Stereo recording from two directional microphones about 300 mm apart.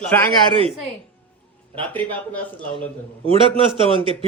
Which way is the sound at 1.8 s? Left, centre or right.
Centre.